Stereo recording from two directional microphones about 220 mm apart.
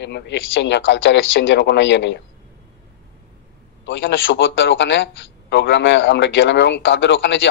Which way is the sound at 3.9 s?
55° left (ahead or behind).